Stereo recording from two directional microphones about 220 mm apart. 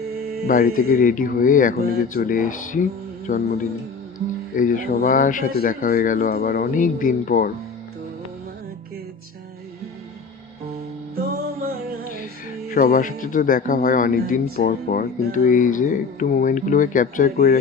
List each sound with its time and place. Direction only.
0.4 s speech: 40° left (ahead or behind)
4.5 s speech: 40° left (ahead or behind)
12.7 s speech: 40° left (ahead or behind)